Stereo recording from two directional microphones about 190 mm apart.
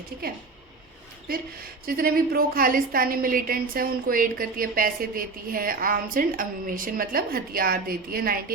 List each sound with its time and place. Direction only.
1.9 s a woman's voice: 50° right (ahead or behind)